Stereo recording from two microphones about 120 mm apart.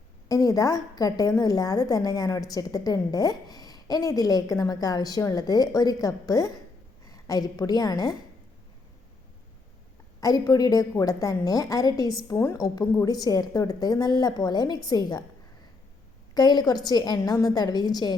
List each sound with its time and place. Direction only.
0.3 s a woman's voice: 30° left (ahead or behind)
10.2 s a woman's voice: 30° left (ahead or behind)
16.3 s a woman's voice: 35° left (ahead or behind)